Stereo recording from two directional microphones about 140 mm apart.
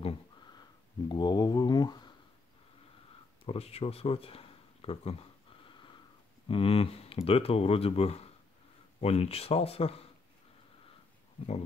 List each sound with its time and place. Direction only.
0.0 s a sound: 30° left (ahead or behind)
3.4 s speech: 45° left (ahead or behind)
5.7 s sniff: 35° left (ahead or behind)
6.5 s speech: 40° left (ahead or behind)